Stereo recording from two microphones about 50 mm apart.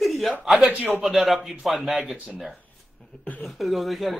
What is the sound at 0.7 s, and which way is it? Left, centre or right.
Cough, right.